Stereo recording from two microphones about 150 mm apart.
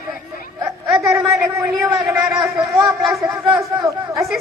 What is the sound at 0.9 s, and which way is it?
Speech, centre (ahead or behind).